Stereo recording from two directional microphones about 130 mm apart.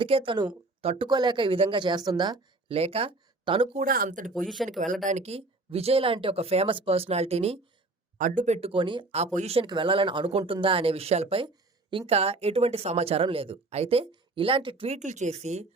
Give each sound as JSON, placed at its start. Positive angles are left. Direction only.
{"t": 0.0, "sound": "a woman's voice", "side_deg": -45}
{"t": 2.6, "sound": "speech", "side_deg": -50}
{"t": 3.8, "sound": "speech", "side_deg": -90}
{"t": 4.4, "sound": "speech", "side_deg": 0}
{"t": 5.0, "sound": "speech", "side_deg": -60}
{"t": 8.2, "sound": "speech", "side_deg": -75}
{"t": 9.1, "sound": "speech", "side_deg": -60}
{"t": 9.6, "sound": "speech", "side_deg": -40}
{"t": 14.9, "sound": "speech", "side_deg": -65}